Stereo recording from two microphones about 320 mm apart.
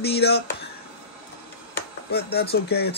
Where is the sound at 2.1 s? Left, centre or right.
Left.